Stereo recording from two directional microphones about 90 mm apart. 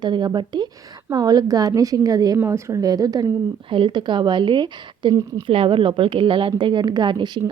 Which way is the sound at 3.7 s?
65° right (ahead or behind).